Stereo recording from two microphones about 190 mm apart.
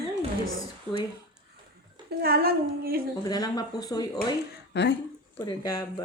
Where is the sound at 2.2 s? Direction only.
55° right (ahead or behind).